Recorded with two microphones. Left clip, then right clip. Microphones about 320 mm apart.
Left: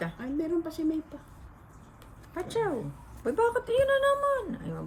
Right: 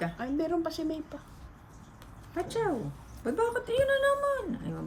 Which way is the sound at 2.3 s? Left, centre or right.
Centre.